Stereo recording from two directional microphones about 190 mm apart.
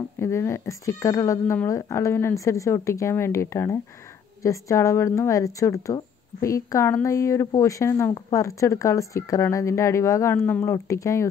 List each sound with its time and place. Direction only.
0.2 s speech: 15° left (ahead or behind)